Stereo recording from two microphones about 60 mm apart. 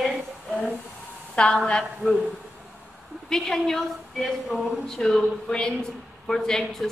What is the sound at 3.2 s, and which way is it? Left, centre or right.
A woman's voice, centre.